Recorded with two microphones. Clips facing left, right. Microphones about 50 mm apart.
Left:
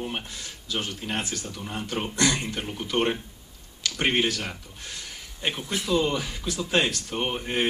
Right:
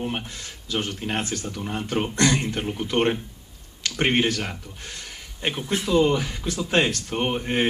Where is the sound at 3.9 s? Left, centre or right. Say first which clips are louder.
Right 3 dB; right.